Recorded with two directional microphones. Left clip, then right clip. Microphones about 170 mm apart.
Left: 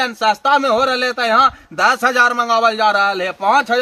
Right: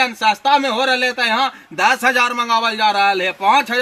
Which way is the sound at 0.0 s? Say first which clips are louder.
Even; 15° left (ahead or behind).